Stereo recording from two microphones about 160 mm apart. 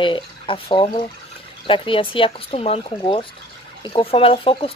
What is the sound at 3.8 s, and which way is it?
Speech, 35° left (ahead or behind).